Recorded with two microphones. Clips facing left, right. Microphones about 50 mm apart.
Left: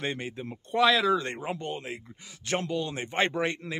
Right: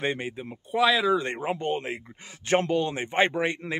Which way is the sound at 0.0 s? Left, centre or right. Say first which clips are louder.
Right 4 dB; centre.